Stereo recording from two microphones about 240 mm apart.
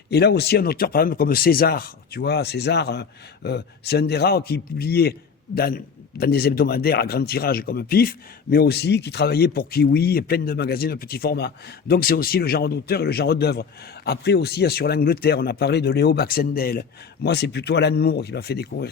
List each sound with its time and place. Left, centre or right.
0.1 s a man's voice: left